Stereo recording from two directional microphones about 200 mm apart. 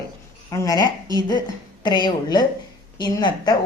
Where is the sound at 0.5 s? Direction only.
15° left (ahead or behind).